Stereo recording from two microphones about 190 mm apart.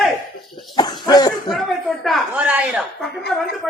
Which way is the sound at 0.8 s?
20° left (ahead or behind).